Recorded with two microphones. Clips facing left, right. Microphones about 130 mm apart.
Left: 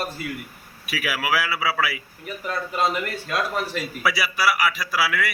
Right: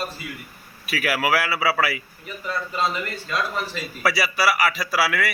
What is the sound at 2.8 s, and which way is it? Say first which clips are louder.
Speech: left 3 dB; 55° left (ahead or behind).